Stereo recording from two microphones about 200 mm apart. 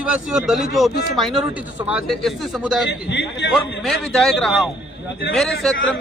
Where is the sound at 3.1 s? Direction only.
60° left (ahead or behind).